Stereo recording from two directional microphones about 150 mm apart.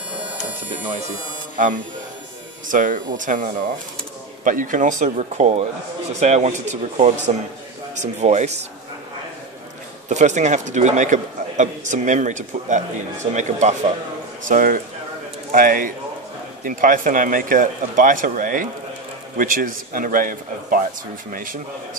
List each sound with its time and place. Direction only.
2.7 s a man's voice: 60° right (ahead or behind)
10.0 s a man's voice: 55° right (ahead or behind)
14.5 s a man's voice: 65° right (ahead or behind)